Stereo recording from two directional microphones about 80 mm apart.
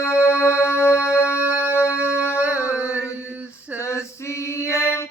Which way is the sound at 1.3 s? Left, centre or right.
Right.